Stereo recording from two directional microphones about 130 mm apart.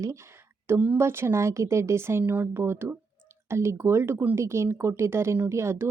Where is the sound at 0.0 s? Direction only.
20° right (ahead or behind).